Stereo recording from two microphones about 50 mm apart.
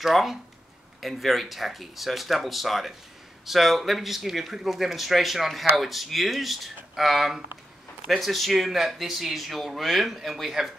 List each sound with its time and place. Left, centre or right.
0.0 s speech: centre